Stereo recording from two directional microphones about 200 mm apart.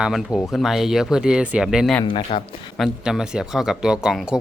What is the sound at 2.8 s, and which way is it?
Speech, 5° right (ahead or behind).